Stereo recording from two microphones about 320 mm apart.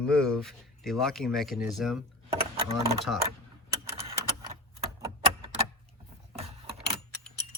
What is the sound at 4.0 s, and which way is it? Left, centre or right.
Typewriter, centre.